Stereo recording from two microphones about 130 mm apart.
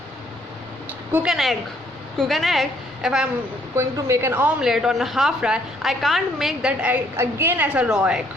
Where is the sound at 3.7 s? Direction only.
20° right (ahead or behind).